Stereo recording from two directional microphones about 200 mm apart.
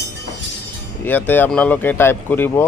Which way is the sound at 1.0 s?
10° left (ahead or behind).